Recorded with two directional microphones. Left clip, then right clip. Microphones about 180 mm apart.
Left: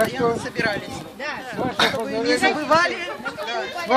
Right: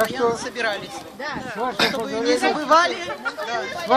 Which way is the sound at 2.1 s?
35° left (ahead or behind).